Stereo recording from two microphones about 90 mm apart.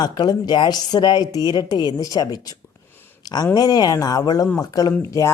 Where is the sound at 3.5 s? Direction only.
45° left (ahead or behind).